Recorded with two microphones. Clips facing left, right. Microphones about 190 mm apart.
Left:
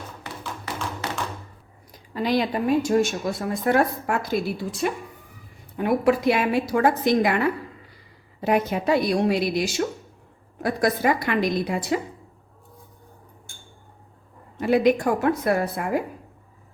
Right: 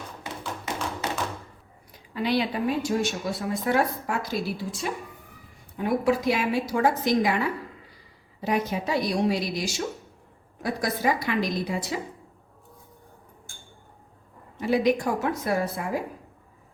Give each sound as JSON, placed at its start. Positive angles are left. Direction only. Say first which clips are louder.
{"t": 1.9, "sound": "a woman's voice", "louder": "left 2 dB", "side_deg": 40}
{"t": 14.6, "sound": "a woman's voice", "louder": "left 4 dB", "side_deg": 60}